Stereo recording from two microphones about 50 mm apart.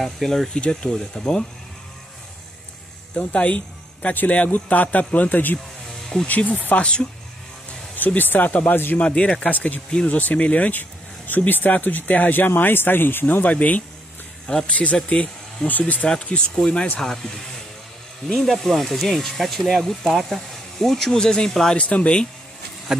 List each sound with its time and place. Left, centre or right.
0.0 s speech: centre
0.5 s speech: centre
3.2 s speech: left
6.8 s speech: centre
7.9 s speech: left
8.9 s speech: left
9.5 s speech: left; by 17.3 s centre
18.3 s speech: centre
21.7 s speech: left